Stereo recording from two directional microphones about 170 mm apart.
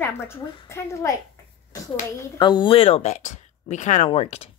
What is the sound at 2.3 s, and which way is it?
Speech, 25° left (ahead or behind).